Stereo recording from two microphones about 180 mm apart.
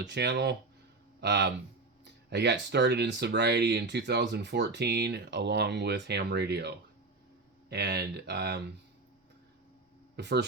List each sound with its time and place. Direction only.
0.0 s speech: 70° right (ahead or behind)
10.2 s speech: 70° right (ahead or behind)